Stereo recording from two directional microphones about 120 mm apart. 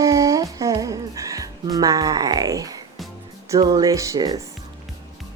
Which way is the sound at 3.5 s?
35° right (ahead or behind).